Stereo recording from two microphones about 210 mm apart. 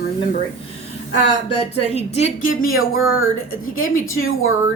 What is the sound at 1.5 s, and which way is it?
Speech, 30° left (ahead or behind).